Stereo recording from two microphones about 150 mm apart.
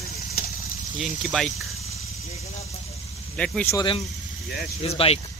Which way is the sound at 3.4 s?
5° left (ahead or behind).